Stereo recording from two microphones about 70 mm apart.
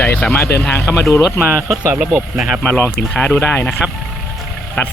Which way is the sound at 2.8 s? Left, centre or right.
Left.